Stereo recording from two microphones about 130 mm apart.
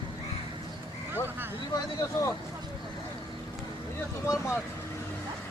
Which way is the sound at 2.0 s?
20° left (ahead or behind).